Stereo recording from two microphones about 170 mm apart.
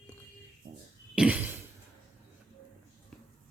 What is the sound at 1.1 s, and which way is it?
Cough, 10° right (ahead or behind).